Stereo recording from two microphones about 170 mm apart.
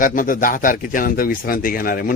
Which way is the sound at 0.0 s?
55° left (ahead or behind).